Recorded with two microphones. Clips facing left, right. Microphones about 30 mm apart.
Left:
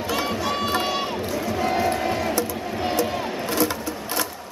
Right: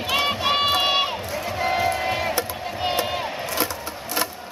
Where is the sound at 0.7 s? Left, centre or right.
Right.